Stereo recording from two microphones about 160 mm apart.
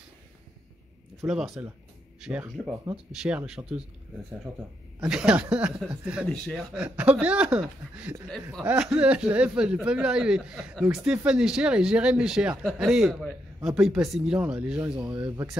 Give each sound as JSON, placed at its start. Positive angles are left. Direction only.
{"t": 1.2, "sound": "speech", "side_deg": -5}
{"t": 5.0, "sound": "speech", "side_deg": -5}
{"t": 15.1, "sound": "speech", "side_deg": -25}